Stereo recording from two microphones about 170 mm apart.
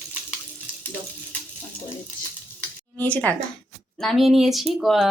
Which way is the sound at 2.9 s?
10° left (ahead or behind).